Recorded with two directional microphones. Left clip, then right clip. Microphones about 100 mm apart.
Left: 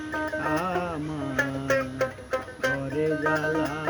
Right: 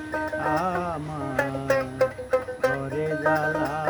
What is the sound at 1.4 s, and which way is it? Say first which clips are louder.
Music: right 1 dB; centre (ahead or behind).